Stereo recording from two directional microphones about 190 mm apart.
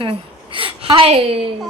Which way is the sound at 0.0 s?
30° right (ahead or behind).